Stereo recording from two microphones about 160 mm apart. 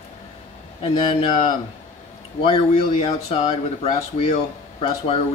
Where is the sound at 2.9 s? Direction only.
40° left (ahead or behind).